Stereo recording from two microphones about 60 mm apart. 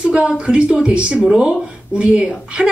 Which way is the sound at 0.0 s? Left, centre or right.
Centre.